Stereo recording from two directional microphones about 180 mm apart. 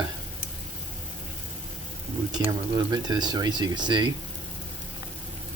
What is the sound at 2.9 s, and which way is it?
Speech, 25° right (ahead or behind).